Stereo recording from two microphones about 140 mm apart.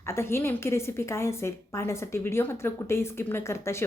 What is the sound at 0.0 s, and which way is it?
A woman's voice, 20° left (ahead or behind).